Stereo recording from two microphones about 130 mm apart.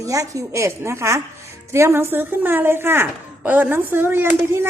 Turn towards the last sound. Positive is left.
turn(degrees=-15)  # may be behind; listen again after turning